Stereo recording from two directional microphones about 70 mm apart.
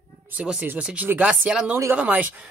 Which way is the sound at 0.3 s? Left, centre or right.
Centre.